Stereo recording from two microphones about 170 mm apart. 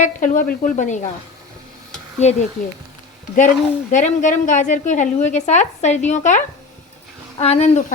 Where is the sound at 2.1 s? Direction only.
40° left (ahead or behind).